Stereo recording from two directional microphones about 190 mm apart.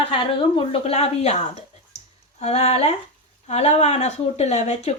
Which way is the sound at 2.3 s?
35° left (ahead or behind).